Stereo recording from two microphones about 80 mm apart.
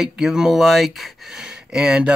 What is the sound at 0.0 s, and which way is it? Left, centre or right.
Speech, centre.